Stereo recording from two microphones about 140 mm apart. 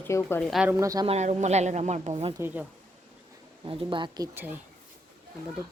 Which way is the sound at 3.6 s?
35° right (ahead or behind).